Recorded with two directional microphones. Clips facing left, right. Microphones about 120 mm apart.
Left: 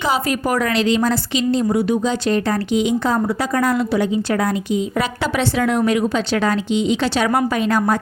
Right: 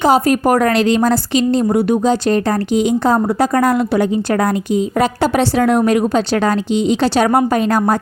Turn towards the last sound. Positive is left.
turn(degrees=-40)  # may be behind; listen again after turning